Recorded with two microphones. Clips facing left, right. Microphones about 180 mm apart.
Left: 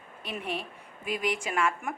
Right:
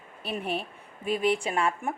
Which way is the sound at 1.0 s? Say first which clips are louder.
Right 5 dB; 30° right (ahead or behind).